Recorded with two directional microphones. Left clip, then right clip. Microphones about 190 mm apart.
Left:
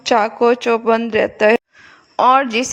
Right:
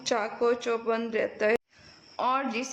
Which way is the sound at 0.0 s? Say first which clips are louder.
Left 13 dB; 45° left (ahead or behind).